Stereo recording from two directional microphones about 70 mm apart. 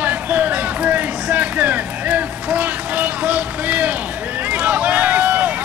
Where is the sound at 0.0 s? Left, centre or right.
Right.